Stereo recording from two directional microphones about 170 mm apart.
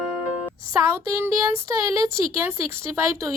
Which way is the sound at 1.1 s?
20° right (ahead or behind).